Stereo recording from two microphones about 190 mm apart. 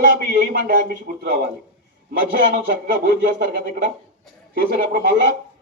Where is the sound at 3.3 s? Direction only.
55° right (ahead or behind).